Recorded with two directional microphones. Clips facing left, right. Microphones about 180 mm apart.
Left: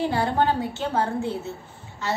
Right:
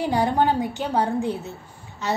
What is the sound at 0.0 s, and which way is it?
A woman's voice, 15° right (ahead or behind).